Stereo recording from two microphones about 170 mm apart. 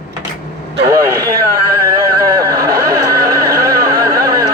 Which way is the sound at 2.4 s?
20° right (ahead or behind).